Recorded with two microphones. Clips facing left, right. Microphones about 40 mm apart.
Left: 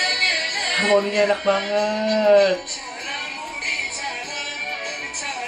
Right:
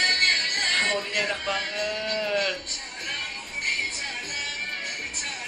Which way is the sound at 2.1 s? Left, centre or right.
Centre.